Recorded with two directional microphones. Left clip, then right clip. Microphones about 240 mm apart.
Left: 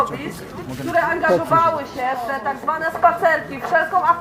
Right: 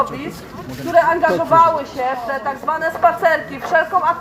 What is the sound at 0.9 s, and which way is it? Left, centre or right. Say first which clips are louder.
A woman's voice: right 4 dB; centre.